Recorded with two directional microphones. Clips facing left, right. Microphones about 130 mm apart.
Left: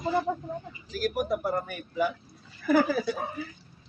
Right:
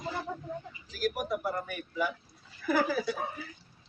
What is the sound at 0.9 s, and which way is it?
Speech, 40° left (ahead or behind).